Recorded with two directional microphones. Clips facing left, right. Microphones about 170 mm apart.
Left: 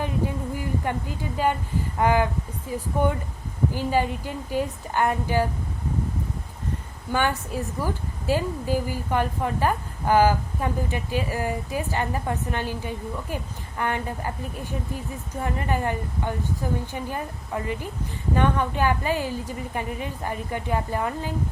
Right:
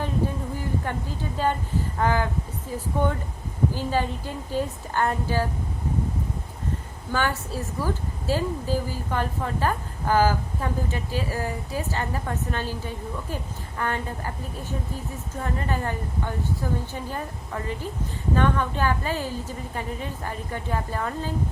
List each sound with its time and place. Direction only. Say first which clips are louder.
0.0 s a sound: even; 15° left (ahead or behind)
1.4 s a woman's voice: left 1 dB; 15° left (ahead or behind)
7.1 s a woman's voice: left 2 dB; 15° left (ahead or behind)
15.4 s a woman's voice: left 2 dB; 15° left (ahead or behind)